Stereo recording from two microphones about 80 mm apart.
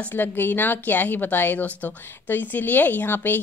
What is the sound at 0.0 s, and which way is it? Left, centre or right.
A woman's voice, left.